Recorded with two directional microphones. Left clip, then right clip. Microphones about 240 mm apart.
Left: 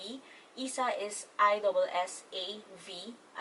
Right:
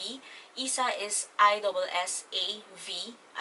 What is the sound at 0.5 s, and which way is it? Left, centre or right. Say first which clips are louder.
A woman's voice: right 3 dB; centre.